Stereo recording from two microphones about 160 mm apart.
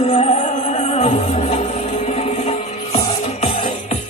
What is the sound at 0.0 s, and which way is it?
Music, 40° left (ahead or behind).